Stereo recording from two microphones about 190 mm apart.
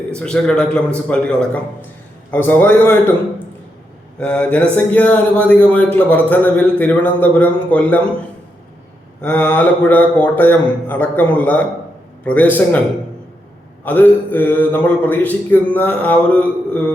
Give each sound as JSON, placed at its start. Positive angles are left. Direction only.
{"t": 0.1, "sound": "a man's voice", "side_deg": 5}
{"t": 4.2, "sound": "speech", "side_deg": 5}
{"t": 9.2, "sound": "speech", "side_deg": 10}
{"t": 13.8, "sound": "speech", "side_deg": 10}